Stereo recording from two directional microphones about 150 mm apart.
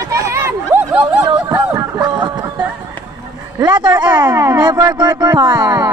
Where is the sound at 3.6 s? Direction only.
30° right (ahead or behind).